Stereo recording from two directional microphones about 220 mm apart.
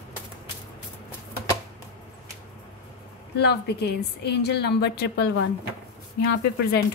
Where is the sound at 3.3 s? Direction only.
50° left (ahead or behind).